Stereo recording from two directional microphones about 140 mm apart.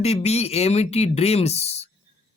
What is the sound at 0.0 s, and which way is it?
Speech, 50° left (ahead or behind).